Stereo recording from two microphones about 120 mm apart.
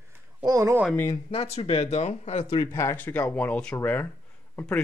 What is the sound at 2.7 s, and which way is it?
Speech, 20° left (ahead or behind).